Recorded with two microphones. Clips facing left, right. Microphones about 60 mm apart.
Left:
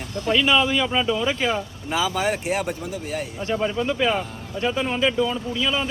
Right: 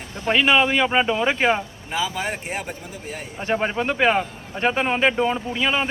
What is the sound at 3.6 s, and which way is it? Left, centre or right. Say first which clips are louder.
Speech: right 1 dB; right.